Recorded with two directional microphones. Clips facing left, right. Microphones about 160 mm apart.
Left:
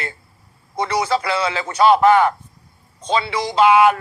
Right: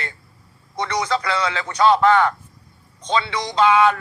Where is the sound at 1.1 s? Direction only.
10° left (ahead or behind).